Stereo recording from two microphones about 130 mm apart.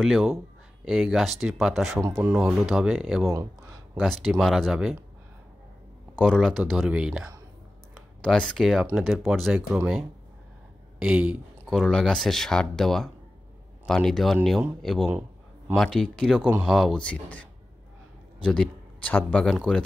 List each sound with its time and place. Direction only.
0.0 s speech: centre (ahead or behind)
2.0 s speech: 20° right (ahead or behind)
2.6 s speech: 5° right (ahead or behind)
6.1 s speech: 5° left (ahead or behind)
7.9 s a sound: 5° left (ahead or behind)
8.9 s speech: centre (ahead or behind)
11.0 s speech: 10° right (ahead or behind)
11.7 s speech: 5° left (ahead or behind)
16.3 s speech: 15° right (ahead or behind)
16.6 s speech: centre (ahead or behind)